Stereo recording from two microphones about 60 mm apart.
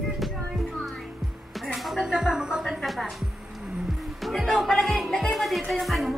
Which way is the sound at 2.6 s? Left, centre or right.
Centre.